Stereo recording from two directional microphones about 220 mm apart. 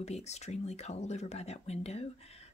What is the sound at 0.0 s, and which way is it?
Speech, 30° left (ahead or behind).